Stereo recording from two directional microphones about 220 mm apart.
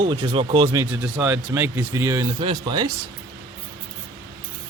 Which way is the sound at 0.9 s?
5° right (ahead or behind).